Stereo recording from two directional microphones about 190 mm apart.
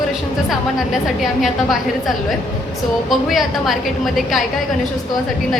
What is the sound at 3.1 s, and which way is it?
A woman's voice, centre (ahead or behind).